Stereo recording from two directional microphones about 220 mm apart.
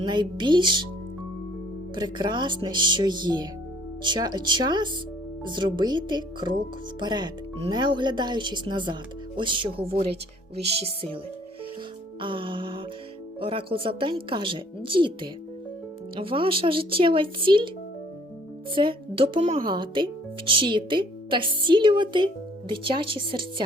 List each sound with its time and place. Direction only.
0.0 s speech: 20° right (ahead or behind)
2.0 s speech: 20° right (ahead or behind)
12.2 s speech: 25° right (ahead or behind)
18.7 s speech: 25° right (ahead or behind)